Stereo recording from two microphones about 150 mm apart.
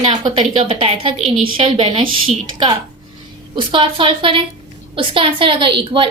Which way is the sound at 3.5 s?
35° right (ahead or behind).